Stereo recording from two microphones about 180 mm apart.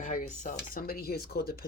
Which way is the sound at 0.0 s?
45° left (ahead or behind).